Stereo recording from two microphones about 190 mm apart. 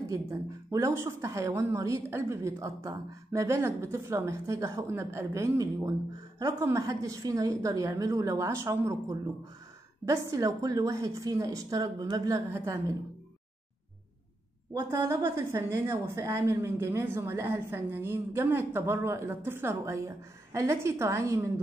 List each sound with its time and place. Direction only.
0.1 s a woman's voice: 15° right (ahead or behind)
14.7 s a woman's voice: 15° right (ahead or behind)